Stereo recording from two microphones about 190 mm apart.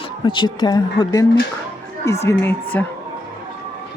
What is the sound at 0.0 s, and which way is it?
Speech, 25° left (ahead or behind).